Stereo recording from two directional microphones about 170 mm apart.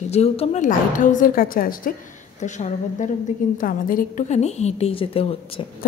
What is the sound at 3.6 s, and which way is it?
A woman's voice, 55° left (ahead or behind).